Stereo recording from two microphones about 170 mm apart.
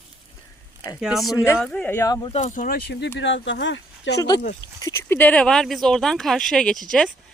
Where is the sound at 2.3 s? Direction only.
45° left (ahead or behind); by 3.1 s 70° left (ahead or behind).